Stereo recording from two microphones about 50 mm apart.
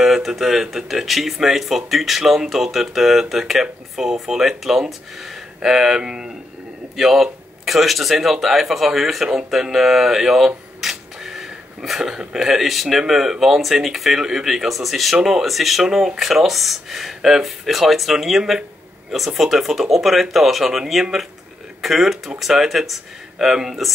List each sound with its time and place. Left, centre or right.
0.0 s speech: centre